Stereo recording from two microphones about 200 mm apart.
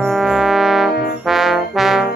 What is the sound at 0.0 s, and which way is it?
Music, centre (ahead or behind).